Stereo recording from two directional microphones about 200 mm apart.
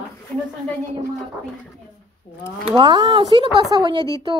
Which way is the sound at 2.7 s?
20° right (ahead or behind).